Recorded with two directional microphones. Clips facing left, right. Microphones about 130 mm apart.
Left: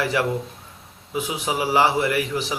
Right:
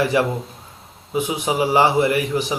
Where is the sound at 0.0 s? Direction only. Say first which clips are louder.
Right 4 dB; 20° right (ahead or behind).